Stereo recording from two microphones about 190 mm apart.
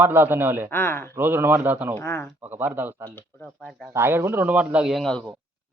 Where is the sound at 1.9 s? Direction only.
15° left (ahead or behind).